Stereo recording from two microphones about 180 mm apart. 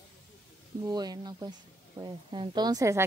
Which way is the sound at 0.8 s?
20° right (ahead or behind).